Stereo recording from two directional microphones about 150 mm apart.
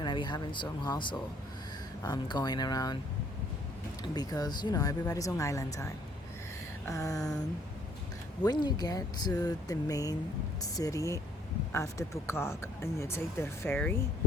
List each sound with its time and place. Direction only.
0.0 s speech: 30° left (ahead or behind)
4.0 s speech: 25° left (ahead or behind)
8.4 s speech: 25° left (ahead or behind)